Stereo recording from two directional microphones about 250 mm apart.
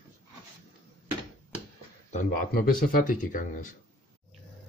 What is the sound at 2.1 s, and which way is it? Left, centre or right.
Speech, left.